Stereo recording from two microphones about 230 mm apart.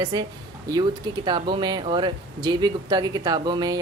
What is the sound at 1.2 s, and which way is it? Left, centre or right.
Speech, centre.